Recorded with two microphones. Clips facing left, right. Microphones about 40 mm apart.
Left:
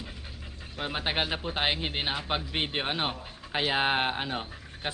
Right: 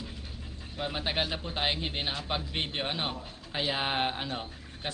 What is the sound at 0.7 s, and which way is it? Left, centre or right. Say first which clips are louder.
Speech: left 1 dB; left.